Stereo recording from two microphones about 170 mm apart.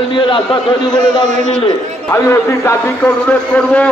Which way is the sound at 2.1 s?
15° left (ahead or behind).